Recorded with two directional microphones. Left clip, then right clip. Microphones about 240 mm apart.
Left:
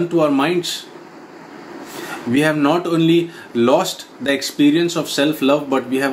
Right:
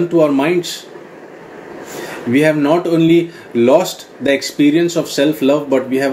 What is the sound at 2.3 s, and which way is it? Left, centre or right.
Speech, centre.